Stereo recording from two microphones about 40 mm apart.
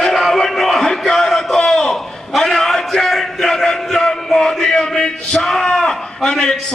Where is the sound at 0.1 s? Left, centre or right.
Centre.